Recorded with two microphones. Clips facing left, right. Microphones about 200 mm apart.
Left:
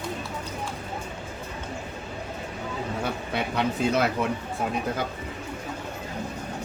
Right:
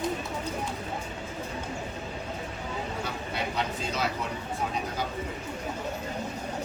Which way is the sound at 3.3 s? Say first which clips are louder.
Left 5 dB; 60° left (ahead or behind).